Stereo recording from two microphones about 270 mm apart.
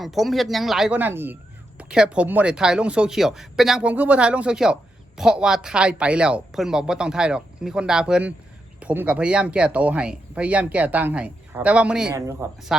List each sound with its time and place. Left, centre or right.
0.0 s speech: centre